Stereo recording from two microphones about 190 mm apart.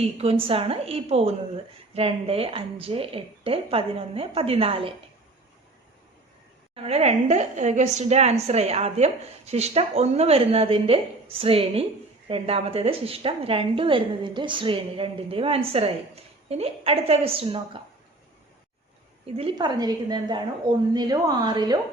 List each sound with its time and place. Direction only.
0.0 s a woman's voice: 30° right (ahead or behind)
6.7 s a woman's voice: 35° right (ahead or behind)
19.2 s a woman's voice: 30° right (ahead or behind)